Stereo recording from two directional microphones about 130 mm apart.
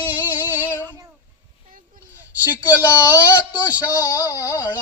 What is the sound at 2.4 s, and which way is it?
Speech, 15° right (ahead or behind).